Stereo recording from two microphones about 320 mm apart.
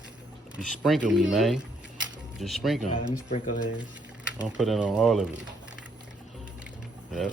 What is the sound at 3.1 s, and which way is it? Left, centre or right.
Speech, left.